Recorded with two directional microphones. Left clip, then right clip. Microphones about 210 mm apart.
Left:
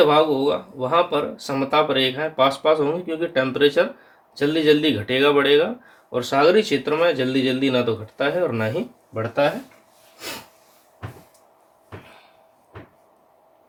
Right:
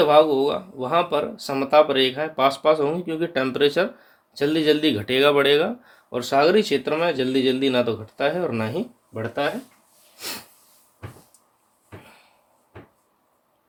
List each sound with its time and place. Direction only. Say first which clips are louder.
0.1 s speech: right 1 dB; 40° right (ahead or behind)
10.2 s sneeze: even; 45° right (ahead or behind)